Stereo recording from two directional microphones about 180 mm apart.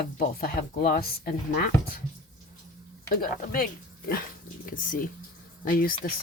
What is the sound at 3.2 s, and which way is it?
Speech, 55° left (ahead or behind).